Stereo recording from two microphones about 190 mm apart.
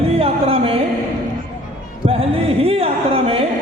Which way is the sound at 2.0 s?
30° right (ahead or behind).